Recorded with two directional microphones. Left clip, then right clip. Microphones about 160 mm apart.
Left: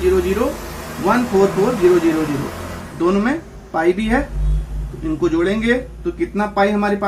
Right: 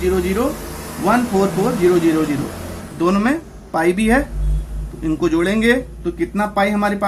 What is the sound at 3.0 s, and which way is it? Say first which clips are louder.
Speech: even; 45° right (ahead or behind).